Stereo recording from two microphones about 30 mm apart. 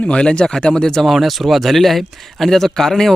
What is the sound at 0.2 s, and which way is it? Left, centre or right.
Speech, left.